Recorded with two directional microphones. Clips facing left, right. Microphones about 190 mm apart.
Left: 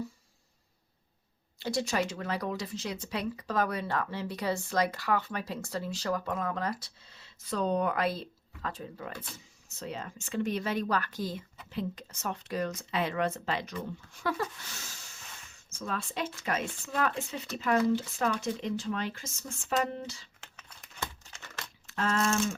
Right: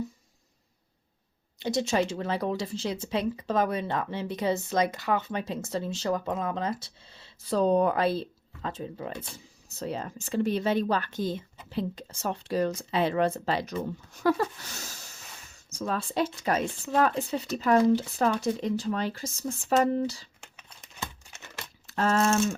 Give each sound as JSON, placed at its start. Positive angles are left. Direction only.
{"t": 1.5, "sound": "speech", "side_deg": -20}
{"t": 9.6, "sound": "speech", "side_deg": -35}
{"t": 20.4, "sound": "computer keyboard", "side_deg": -20}
{"t": 21.2, "sound": "crumpling", "side_deg": -20}
{"t": 21.8, "sound": "speech", "side_deg": -40}